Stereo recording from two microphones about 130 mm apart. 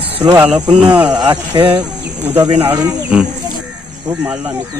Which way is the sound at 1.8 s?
15° right (ahead or behind).